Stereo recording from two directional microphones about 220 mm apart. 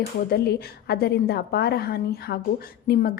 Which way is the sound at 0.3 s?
45° left (ahead or behind).